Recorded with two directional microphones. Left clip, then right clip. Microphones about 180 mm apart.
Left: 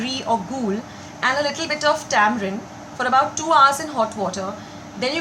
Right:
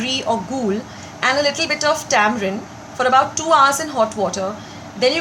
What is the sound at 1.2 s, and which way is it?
A woman's voice, 20° right (ahead or behind).